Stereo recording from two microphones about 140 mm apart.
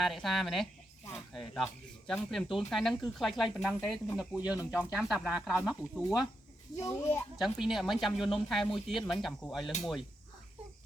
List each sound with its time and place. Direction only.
0.0 s speech: centre (ahead or behind)
6.7 s speech: 20° left (ahead or behind)
7.3 s speech: centre (ahead or behind)